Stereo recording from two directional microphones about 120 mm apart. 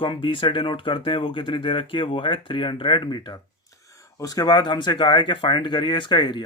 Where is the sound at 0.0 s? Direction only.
45° left (ahead or behind).